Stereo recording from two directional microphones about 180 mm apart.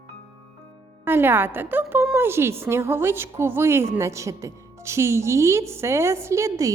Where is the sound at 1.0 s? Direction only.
10° right (ahead or behind).